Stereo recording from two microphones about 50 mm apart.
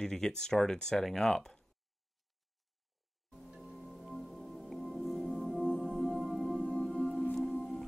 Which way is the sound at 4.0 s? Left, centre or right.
Centre.